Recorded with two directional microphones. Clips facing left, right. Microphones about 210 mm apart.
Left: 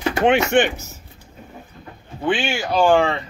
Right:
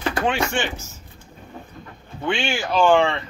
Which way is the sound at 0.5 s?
60° left (ahead or behind).